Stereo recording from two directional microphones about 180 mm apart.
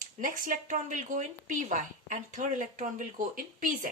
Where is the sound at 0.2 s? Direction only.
45° right (ahead or behind).